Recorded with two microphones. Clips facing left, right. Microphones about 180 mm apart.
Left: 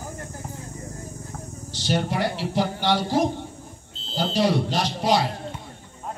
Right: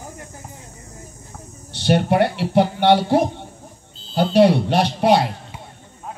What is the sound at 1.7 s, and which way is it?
Speech, 60° right (ahead or behind).